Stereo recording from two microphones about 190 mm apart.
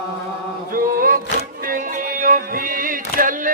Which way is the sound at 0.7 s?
45° right (ahead or behind).